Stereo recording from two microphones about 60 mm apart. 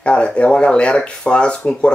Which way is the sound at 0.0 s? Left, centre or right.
Centre.